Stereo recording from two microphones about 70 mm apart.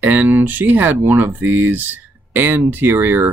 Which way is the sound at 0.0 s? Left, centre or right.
Right.